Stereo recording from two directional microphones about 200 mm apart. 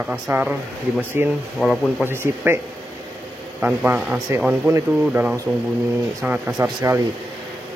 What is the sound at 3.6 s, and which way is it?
Speech, 5° right (ahead or behind).